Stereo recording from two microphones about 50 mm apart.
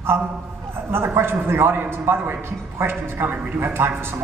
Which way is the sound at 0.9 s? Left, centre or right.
Right.